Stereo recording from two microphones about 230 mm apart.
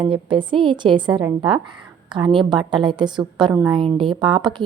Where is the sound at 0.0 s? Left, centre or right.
Right.